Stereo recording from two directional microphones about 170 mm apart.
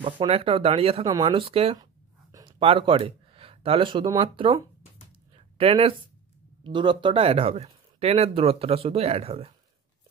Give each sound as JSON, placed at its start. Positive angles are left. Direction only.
{"t": 0.0, "sound": "speech", "side_deg": -30}
{"t": 1.0, "sound": "speech", "side_deg": -25}
{"t": 2.3, "sound": "a sound", "side_deg": -30}
{"t": 4.2, "sound": "speech", "side_deg": -30}
{"t": 5.6, "sound": "speech", "side_deg": -35}